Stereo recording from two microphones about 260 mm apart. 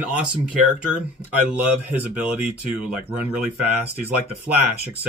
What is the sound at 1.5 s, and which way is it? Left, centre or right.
Speech, centre.